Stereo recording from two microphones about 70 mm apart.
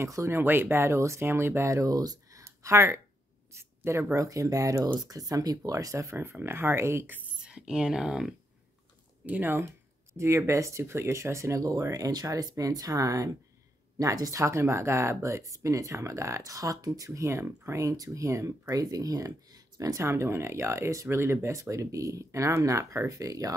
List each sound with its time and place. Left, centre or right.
0.0 s speech: right
0.4 s speech: right
2.0 s speech: right
2.4 s a sound: right
4.1 s speech: right
6.4 s speech: right
7.3 s speech: centre
9.2 s speech: right
10.1 s speech: right
12.1 s speech: right